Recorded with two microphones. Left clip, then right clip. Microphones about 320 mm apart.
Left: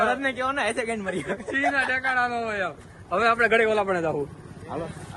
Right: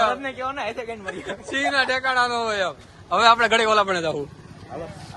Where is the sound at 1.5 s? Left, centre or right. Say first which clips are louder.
Right 3 dB; centre.